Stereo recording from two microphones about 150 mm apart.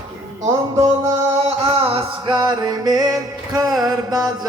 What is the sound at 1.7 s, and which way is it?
Music, 40° right (ahead or behind).